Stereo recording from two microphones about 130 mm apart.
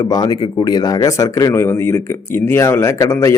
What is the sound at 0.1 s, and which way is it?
A man's voice, 30° left (ahead or behind).